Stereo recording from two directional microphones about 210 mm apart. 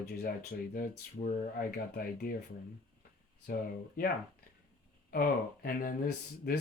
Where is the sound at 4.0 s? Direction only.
45° left (ahead or behind).